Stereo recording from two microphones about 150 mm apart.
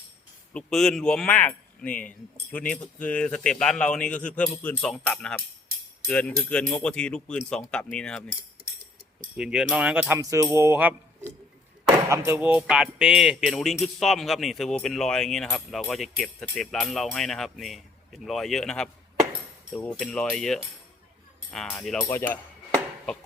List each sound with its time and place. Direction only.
0.5 s speech: 5° left (ahead or behind)
9.4 s music: 5° right (ahead or behind)
12.0 s speech: 20° right (ahead or behind); by 22.4 s 15° left (ahead or behind)